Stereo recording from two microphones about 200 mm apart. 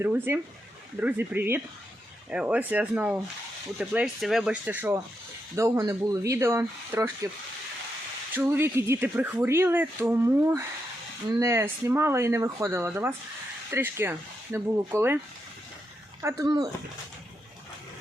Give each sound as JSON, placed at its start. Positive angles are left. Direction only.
{"t": 0.0, "sound": "speech", "side_deg": -10}
{"t": 8.3, "sound": "speech", "side_deg": -10}
{"t": 16.2, "sound": "speech", "side_deg": -20}